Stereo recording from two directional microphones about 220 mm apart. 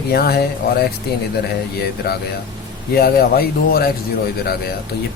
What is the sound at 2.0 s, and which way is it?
Speech, 45° left (ahead or behind).